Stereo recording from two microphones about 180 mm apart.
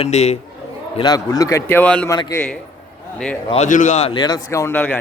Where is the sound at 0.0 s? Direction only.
35° left (ahead or behind).